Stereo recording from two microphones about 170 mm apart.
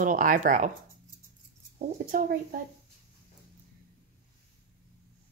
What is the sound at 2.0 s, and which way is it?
Speech, 55° right (ahead or behind).